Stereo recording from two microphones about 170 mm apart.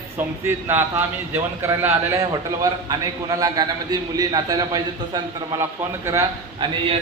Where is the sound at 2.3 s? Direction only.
20° right (ahead or behind).